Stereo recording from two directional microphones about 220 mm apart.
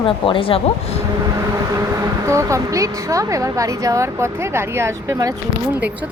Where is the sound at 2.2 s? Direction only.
15° right (ahead or behind).